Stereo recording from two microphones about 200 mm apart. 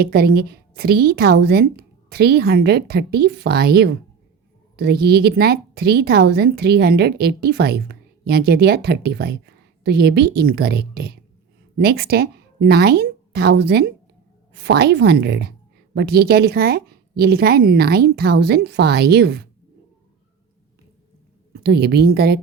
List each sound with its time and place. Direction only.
0.0 s a woman's voice: 50° right (ahead or behind)
21.5 s speech: 55° right (ahead or behind)